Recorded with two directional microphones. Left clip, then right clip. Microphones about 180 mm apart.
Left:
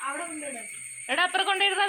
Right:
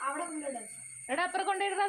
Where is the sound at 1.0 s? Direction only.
5° left (ahead or behind).